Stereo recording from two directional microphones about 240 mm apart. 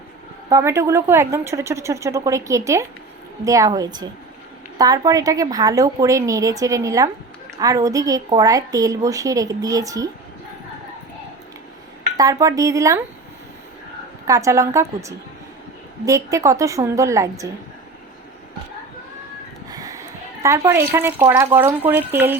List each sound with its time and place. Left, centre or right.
0.5 s a woman's voice: centre
12.1 s a woman's voice: centre
14.3 s a woman's voice: centre
19.7 s a sound: centre
20.7 s a woman's voice: centre